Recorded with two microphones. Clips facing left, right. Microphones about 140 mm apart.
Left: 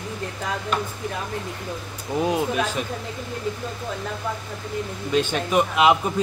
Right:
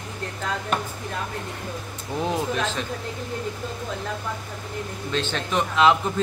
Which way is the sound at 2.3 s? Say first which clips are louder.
Left 1 dB; 10° left (ahead or behind).